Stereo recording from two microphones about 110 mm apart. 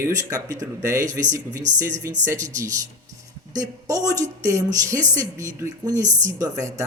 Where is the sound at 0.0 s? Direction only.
30° right (ahead or behind).